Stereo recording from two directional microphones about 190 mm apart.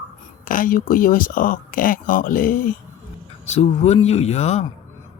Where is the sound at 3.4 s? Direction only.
35° left (ahead or behind).